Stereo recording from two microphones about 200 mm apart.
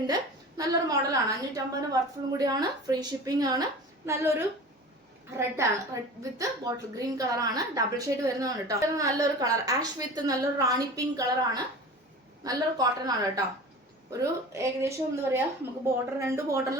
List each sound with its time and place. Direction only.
0.1 s a woman's voice: 20° right (ahead or behind)